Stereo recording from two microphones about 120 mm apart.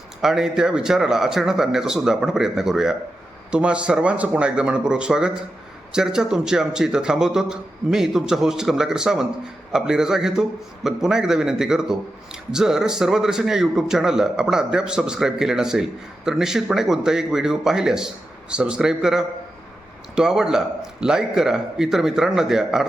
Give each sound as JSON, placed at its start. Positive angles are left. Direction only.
{"t": 0.2, "sound": "a man's voice", "side_deg": -5}